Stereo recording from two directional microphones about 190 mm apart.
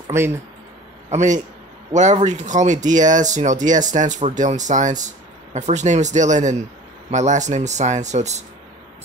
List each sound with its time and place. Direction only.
0.1 s speech: 15° right (ahead or behind)
1.1 s speech: 40° right (ahead or behind)